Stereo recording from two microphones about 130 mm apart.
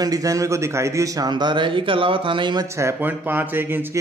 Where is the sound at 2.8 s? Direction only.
20° right (ahead or behind).